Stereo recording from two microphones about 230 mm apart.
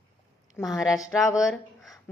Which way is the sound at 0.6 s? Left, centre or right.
Centre.